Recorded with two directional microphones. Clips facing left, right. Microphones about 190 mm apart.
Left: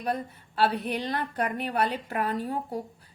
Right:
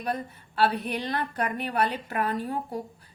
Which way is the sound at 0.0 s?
25° left (ahead or behind).